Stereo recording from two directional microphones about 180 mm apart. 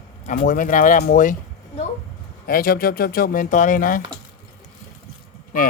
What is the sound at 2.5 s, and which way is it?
Speech, 55° left (ahead or behind).